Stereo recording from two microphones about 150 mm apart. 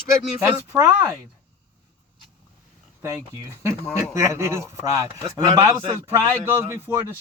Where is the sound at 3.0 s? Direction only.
15° right (ahead or behind).